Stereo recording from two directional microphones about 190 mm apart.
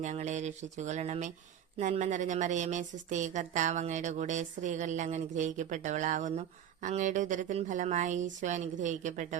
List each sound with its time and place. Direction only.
0.0 s a woman's voice: 40° right (ahead or behind)